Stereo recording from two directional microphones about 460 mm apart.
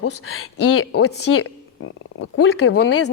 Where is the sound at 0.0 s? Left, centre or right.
Left.